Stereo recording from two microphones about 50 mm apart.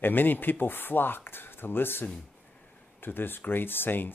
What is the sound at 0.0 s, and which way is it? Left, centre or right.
Speech, left.